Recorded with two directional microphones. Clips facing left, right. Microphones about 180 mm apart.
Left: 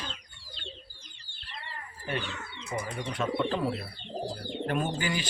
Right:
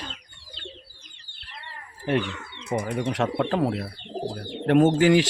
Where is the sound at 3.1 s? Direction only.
80° right.